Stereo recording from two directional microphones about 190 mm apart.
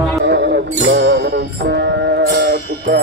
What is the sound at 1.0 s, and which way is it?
Music, 65° right (ahead or behind).